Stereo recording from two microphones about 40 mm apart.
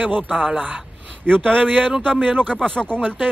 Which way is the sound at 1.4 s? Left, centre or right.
Right.